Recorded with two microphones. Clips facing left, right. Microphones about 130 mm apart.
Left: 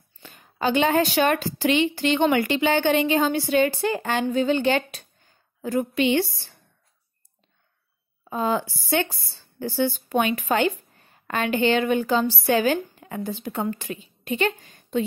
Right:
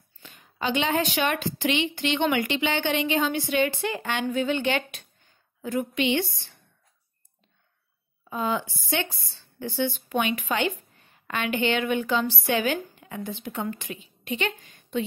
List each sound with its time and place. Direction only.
0.2 s a woman's voice: 40° left (ahead or behind)
8.3 s a woman's voice: 40° left (ahead or behind)